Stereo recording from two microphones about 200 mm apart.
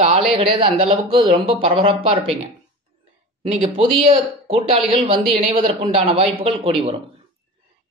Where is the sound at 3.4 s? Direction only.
30° right (ahead or behind).